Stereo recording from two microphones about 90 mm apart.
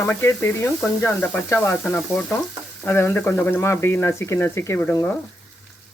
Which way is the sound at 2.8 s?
25° left (ahead or behind).